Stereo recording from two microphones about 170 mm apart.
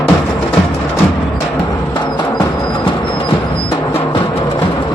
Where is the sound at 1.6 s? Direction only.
25° left (ahead or behind).